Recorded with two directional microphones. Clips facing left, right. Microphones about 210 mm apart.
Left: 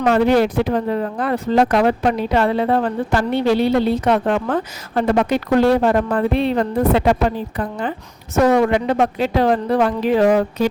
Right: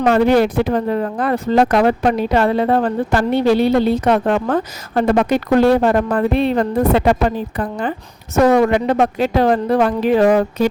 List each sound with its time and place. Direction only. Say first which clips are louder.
0.0 s speech: right 2 dB; 50° right (ahead or behind)